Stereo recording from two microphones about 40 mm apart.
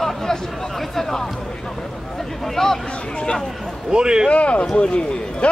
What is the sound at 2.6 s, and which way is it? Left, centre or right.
Speech, centre.